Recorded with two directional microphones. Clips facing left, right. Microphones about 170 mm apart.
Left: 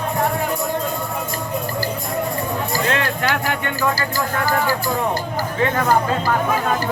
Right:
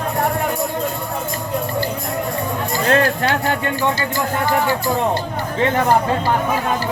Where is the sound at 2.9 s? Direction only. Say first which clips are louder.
Right 5 dB; 30° right (ahead or behind).